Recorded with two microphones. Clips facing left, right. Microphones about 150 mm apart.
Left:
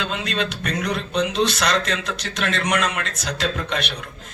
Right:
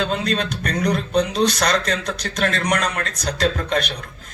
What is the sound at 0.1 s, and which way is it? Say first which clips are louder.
Speech: right 3 dB; 40° right (ahead or behind).